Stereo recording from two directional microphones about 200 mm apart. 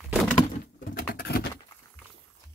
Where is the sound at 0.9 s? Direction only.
50° left (ahead or behind).